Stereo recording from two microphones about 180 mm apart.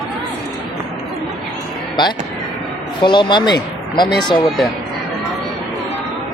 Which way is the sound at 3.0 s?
25° left (ahead or behind).